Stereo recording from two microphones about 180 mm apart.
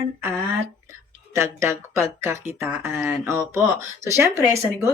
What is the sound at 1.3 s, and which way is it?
Speech, 15° right (ahead or behind).